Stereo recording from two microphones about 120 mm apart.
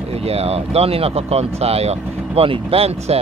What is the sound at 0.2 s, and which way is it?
Speech, 60° right (ahead or behind).